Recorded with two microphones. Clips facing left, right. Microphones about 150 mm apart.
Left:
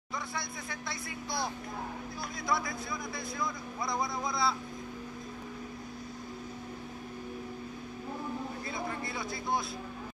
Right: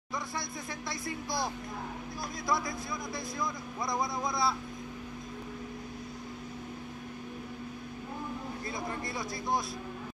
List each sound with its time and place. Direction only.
3.3 s speech: 20° right (ahead or behind)